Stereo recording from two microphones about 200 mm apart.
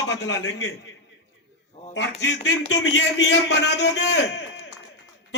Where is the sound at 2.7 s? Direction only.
60° left (ahead or behind).